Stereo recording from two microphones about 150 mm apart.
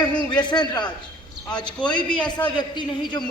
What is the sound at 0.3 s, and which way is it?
Speech, 30° left (ahead or behind).